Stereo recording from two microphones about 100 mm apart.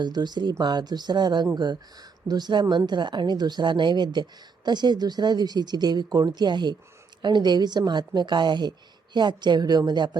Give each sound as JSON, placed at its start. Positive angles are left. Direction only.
{"t": 0.0, "sound": "speech", "side_deg": -45}